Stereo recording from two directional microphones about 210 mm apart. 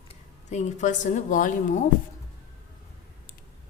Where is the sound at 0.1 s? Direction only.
35° left (ahead or behind).